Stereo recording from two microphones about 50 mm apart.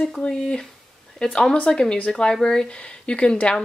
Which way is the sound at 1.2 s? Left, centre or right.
Centre.